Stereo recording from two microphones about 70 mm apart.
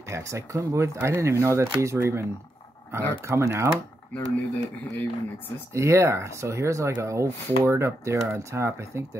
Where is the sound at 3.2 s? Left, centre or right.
Right.